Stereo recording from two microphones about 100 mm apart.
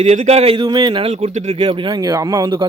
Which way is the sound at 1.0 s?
90° right.